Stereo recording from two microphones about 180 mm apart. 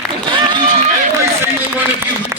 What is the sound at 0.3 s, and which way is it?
Run, 25° right (ahead or behind).